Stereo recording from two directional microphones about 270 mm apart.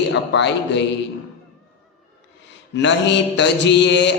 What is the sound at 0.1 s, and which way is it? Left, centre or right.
Speech, left.